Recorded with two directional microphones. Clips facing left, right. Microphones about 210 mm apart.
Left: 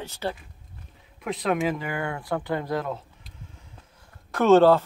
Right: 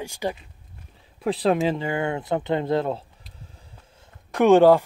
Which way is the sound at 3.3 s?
35° right (ahead or behind).